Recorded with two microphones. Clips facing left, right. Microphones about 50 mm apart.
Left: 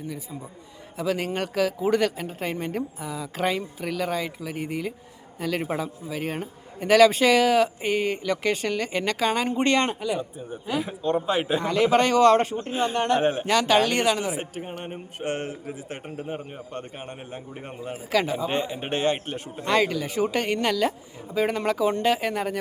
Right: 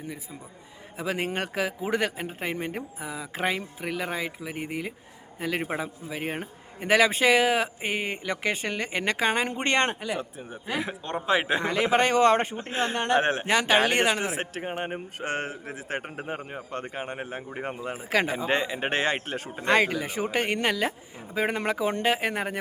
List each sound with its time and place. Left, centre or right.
0.9 s a man's voice: right
10.8 s speech: right
11.6 s a man's voice: right
14.3 s speech: right
15.6 s speech: right
17.9 s speech: right
18.4 s speech: right
19.6 s a man's voice: right